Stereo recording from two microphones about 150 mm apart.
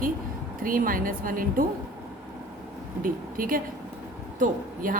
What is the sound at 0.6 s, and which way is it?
Speech, 70° right (ahead or behind).